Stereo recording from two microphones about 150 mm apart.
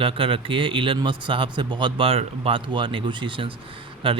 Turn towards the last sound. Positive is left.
turn(degrees=-35)  # may be behind; listen again after turning